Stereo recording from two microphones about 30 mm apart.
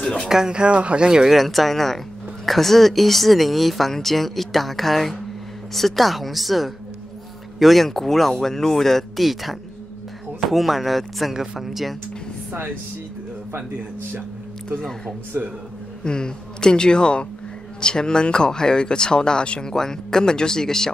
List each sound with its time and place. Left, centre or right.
0.3 s speech: right
1.2 s speech: centre
9.1 s speech: centre
16.0 s speech: left